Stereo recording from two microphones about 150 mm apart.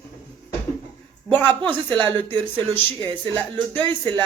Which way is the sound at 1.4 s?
30° right (ahead or behind).